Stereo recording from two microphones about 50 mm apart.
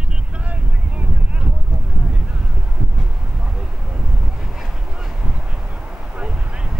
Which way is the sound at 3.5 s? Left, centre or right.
Centre.